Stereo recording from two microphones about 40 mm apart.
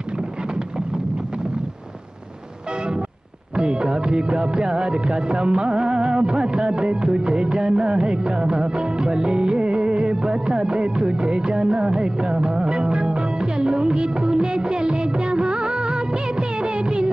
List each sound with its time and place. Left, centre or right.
3.5 s music: right